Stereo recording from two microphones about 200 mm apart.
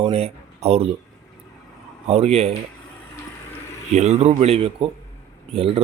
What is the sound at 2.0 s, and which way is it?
Speech, 30° right (ahead or behind).